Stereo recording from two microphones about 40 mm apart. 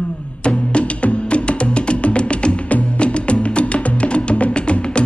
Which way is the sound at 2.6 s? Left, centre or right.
Left.